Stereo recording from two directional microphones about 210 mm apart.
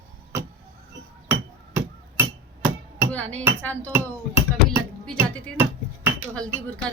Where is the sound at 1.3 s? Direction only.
10° right (ahead or behind).